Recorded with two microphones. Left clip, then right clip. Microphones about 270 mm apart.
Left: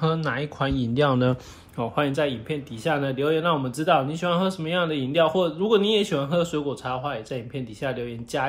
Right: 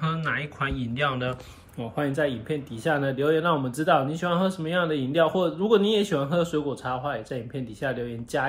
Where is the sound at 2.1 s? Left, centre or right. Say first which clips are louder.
Left 1 dB; centre.